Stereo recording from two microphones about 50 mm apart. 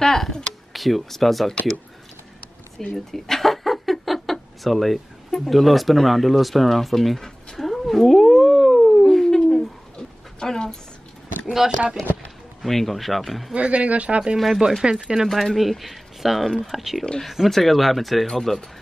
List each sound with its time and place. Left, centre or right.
0.0 s speech: centre
2.9 s a sound: centre
11.5 s speech: centre
12.6 s speech: centre
13.5 s speech: right
14.3 s speech: centre
14.8 s speech: centre
15.2 s speech: centre
17.0 s speech: centre